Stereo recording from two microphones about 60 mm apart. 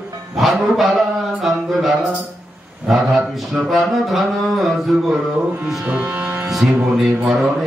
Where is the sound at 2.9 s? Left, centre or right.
Centre.